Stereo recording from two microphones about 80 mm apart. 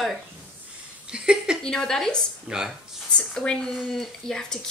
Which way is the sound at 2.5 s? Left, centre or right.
Centre.